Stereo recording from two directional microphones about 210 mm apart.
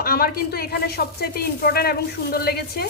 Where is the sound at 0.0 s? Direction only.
45° left (ahead or behind).